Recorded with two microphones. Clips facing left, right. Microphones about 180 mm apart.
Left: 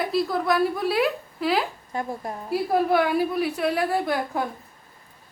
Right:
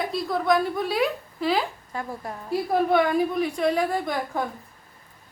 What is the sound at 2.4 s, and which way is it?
A woman's voice, 5° left (ahead or behind).